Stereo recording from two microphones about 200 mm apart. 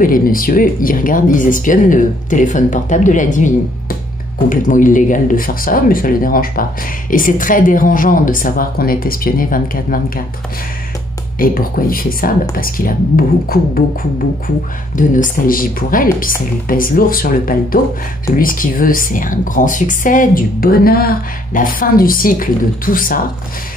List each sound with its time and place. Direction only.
0.0 s speech: 45° left (ahead or behind)
11.3 s speech: 45° left (ahead or behind)